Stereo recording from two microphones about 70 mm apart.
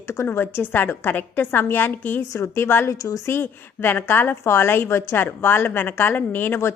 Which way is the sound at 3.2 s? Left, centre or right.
Left.